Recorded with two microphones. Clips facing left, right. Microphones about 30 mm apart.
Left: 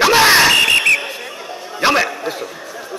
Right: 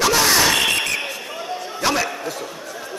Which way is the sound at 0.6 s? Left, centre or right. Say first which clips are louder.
Left 7 dB; left.